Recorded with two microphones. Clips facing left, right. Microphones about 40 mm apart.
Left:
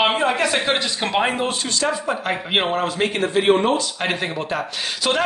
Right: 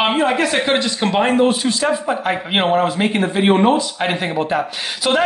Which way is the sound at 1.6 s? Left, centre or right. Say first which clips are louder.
Right 4 dB; centre.